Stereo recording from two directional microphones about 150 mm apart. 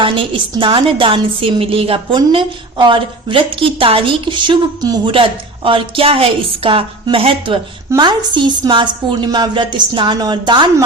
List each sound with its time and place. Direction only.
0.0 s a woman's voice: 35° right (ahead or behind)